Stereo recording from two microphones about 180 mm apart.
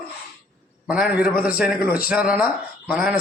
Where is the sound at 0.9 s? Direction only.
5° right (ahead or behind).